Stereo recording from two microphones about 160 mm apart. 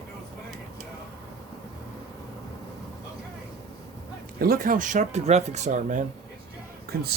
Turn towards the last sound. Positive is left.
turn(degrees=-70)  # may be behind; listen again after turning